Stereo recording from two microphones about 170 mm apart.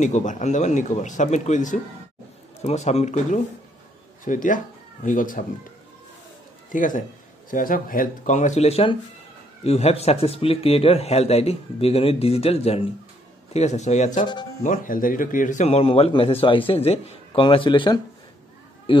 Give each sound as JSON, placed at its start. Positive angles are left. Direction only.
{"t": 0.0, "sound": "a man's voice", "side_deg": 45}
{"t": 6.7, "sound": "a man's voice", "side_deg": 50}